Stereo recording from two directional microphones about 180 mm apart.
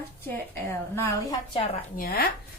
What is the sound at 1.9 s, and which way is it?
Speech, 55° left (ahead or behind).